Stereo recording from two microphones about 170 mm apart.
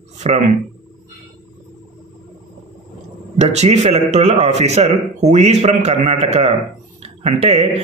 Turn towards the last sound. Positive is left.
turn(degrees=-40)  # may be behind; listen again after turning